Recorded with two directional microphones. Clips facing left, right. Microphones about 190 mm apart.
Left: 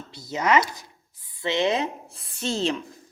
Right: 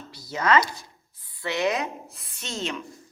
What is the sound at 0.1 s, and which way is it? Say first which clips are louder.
Speech: even; 20° left (ahead or behind).